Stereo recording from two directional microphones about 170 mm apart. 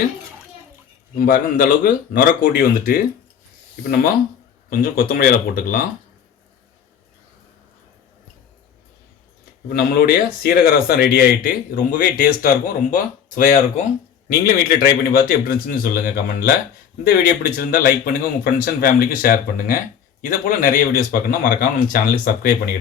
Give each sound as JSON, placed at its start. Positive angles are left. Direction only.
{"t": 1.2, "sound": "speech", "side_deg": 55}
{"t": 9.6, "sound": "speech", "side_deg": 65}